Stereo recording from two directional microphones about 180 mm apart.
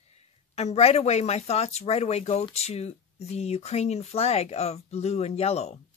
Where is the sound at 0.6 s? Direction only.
35° left (ahead or behind).